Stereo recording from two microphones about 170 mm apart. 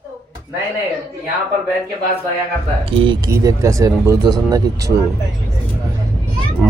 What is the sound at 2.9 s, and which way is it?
Speech, 25° right (ahead or behind).